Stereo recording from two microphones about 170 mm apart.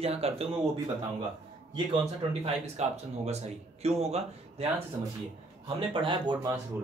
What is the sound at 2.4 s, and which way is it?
Speech, 40° right (ahead or behind).